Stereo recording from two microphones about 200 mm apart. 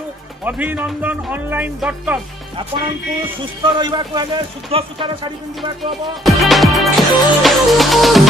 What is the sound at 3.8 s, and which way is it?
Speech, 20° right (ahead or behind).